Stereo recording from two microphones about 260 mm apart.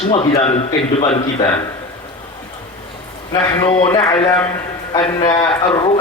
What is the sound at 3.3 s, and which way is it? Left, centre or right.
Speech, centre.